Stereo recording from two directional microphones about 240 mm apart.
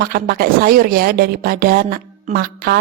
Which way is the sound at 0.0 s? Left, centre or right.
Right.